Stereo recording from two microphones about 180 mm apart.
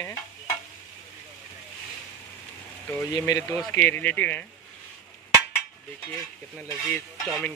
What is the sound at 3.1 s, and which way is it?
Speech, 20° left (ahead or behind).